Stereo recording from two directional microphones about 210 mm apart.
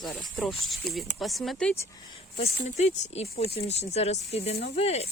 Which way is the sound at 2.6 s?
35° left (ahead or behind).